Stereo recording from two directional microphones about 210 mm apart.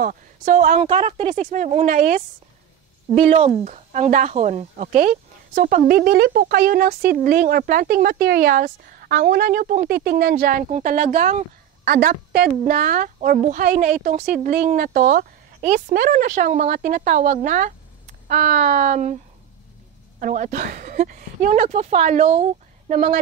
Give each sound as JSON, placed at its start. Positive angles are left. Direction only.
{"t": 0.0, "sound": "speech", "side_deg": -40}
{"t": 3.2, "sound": "speech", "side_deg": -30}
{"t": 20.2, "sound": "speech", "side_deg": -35}